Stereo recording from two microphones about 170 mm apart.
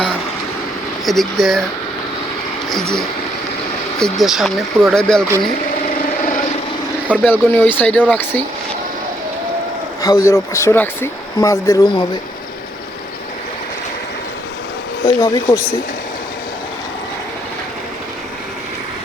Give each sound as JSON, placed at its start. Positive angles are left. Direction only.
{"t": 1.0, "sound": "speech", "side_deg": 0}
{"t": 4.0, "sound": "speech", "side_deg": 0}
{"t": 6.2, "sound": "vehicle", "side_deg": 50}
{"t": 7.1, "sound": "speech", "side_deg": 10}
{"t": 10.0, "sound": "speech", "side_deg": 20}
{"t": 15.0, "sound": "speech", "side_deg": 20}